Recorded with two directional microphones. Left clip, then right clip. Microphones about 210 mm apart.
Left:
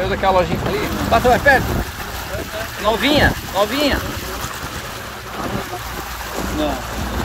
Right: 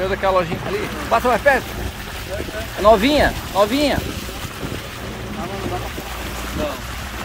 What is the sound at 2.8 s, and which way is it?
Speech, 25° right (ahead or behind).